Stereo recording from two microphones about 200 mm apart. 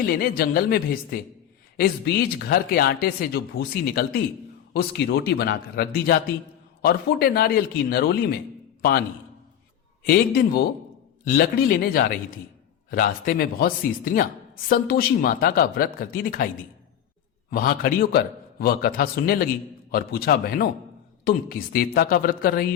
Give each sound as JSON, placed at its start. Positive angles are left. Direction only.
{"t": 0.1, "sound": "speech", "side_deg": 50}
{"t": 2.4, "sound": "a man's voice", "side_deg": 50}
{"t": 17.5, "sound": "speech", "side_deg": 45}